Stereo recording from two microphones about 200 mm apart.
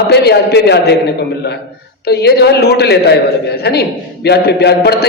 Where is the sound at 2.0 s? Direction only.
55° left (ahead or behind).